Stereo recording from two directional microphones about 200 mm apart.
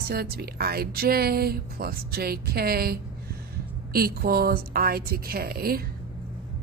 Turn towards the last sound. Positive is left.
turn(degrees=-50)  # may be behind; listen again after turning